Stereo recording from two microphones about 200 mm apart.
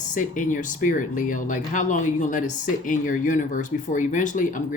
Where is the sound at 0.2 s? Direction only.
40° left (ahead or behind).